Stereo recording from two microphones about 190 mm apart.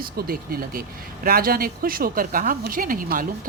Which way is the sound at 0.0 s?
50° right (ahead or behind).